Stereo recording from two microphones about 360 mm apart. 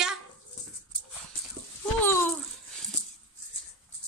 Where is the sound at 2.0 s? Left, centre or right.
Centre.